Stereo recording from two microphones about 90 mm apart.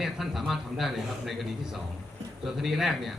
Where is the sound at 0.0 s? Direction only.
Centre (ahead or behind).